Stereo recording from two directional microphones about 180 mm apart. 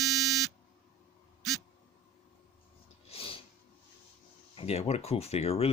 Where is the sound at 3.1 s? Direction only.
30° left (ahead or behind).